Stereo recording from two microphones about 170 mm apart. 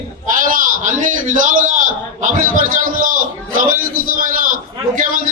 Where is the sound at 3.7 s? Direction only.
55° right (ahead or behind).